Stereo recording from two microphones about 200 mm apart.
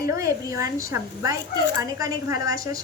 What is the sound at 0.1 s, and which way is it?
A woman's voice, 15° right (ahead or behind).